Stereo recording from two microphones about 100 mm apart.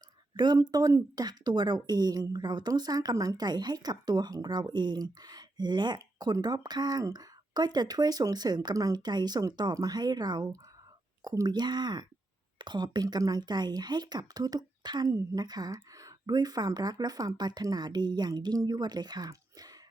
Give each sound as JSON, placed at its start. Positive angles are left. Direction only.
{"t": 0.3, "sound": "a woman's voice", "side_deg": -45}